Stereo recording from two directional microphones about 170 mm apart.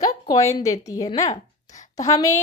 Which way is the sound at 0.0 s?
20° left (ahead or behind).